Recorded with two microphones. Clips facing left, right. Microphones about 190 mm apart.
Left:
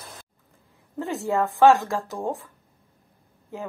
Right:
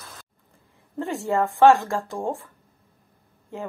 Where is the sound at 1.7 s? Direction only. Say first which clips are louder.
Right 1 dB; centre (ahead or behind).